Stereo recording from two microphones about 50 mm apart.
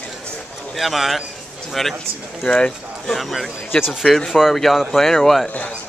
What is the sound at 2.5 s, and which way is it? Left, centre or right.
Speech, centre.